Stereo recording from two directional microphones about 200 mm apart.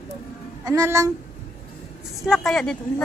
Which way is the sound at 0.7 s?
15° right (ahead or behind).